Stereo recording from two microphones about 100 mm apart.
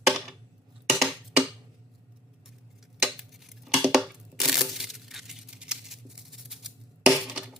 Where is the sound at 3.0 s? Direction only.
Centre (ahead or behind).